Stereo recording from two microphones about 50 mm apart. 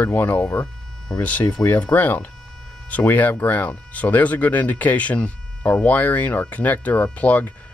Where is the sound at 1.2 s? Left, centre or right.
Left.